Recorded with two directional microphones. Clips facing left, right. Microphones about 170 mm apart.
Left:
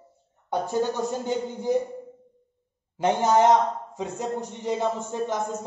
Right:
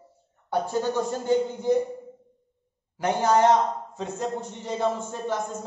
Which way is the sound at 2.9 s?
20° left (ahead or behind).